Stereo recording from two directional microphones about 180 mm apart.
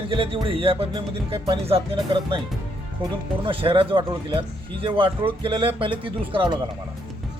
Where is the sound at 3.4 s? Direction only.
30° right (ahead or behind).